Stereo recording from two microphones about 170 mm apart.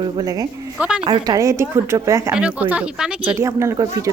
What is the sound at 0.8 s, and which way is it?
Speech, 5° right (ahead or behind).